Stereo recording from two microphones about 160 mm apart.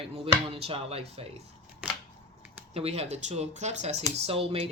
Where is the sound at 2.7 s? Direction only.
40° right (ahead or behind).